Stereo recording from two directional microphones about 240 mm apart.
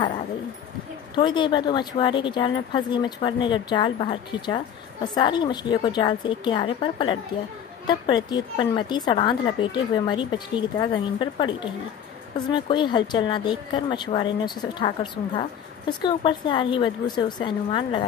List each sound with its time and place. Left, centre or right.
1.1 s a woman's voice: centre